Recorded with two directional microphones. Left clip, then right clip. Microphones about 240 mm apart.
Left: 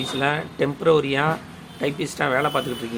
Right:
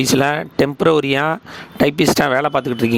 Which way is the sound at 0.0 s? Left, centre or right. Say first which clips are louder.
Right 7 dB; right.